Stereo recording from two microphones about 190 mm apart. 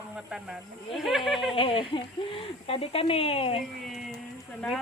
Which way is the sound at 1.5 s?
30° left (ahead or behind).